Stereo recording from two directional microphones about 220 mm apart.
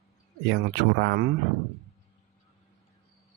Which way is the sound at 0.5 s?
50° right (ahead or behind).